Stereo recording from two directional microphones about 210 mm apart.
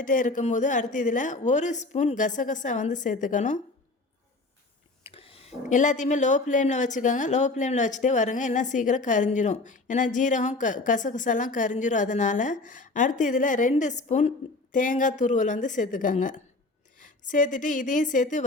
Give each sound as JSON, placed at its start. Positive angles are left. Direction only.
{"t": 0.0, "sound": "speech", "side_deg": 40}
{"t": 5.0, "sound": "speech", "side_deg": 25}